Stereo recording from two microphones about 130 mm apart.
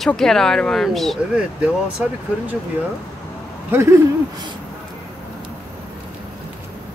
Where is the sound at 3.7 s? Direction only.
20° right (ahead or behind).